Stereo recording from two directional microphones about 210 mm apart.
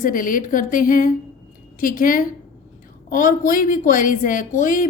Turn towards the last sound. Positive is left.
turn(degrees=40)  # may be behind; listen again after turning